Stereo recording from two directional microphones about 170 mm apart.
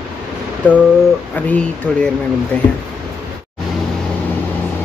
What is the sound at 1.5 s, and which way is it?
Speech, 5° left (ahead or behind).